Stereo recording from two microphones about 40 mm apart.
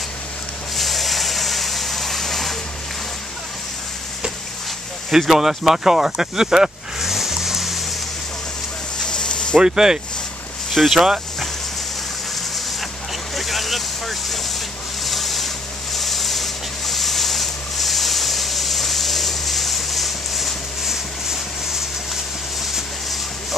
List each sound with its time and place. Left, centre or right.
0.7 s vehicle: centre
5.2 s speech: centre
9.0 s a sound: left
9.6 s speech: centre
10.7 s speech: centre
13.4 s vehicle: centre
15.0 s rub: centre